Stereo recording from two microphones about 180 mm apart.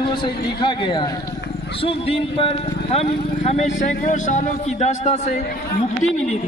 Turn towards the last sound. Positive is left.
turn(degrees=40)  # may be behind; listen again after turning